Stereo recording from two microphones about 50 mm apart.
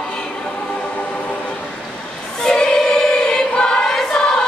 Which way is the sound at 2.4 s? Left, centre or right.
Centre.